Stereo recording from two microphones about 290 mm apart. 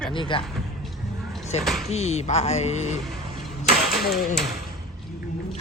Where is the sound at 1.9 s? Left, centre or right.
Left.